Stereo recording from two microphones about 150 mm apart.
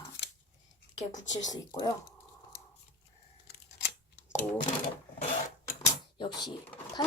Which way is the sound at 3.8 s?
90° left.